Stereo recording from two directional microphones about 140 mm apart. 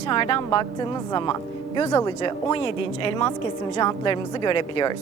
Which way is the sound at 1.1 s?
25° left (ahead or behind).